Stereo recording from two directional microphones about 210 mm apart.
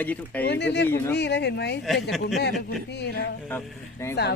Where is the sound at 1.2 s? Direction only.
55° left (ahead or behind).